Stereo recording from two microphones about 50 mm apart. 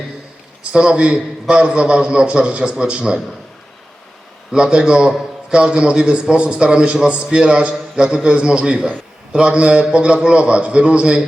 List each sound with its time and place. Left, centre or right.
0.6 s a man's voice: right
4.5 s a man's voice: centre